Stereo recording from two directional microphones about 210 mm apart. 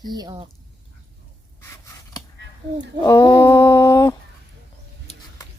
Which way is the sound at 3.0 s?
20° left (ahead or behind).